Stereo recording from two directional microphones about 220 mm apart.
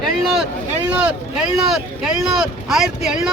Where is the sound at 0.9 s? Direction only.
5° right (ahead or behind).